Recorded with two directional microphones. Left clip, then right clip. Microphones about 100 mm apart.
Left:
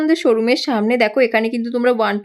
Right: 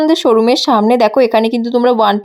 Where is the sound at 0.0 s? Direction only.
30° right (ahead or behind).